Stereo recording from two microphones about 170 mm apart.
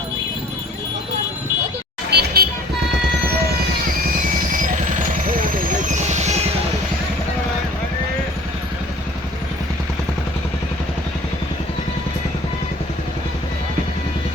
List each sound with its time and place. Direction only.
2.0 s vehicle: 65° right (ahead or behind)
5.9 s music: 40° right (ahead or behind)